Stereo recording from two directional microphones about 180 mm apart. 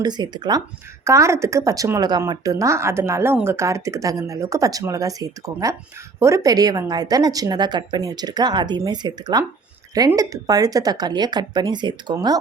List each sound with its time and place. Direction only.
0.0 s a woman's voice: 25° right (ahead or behind)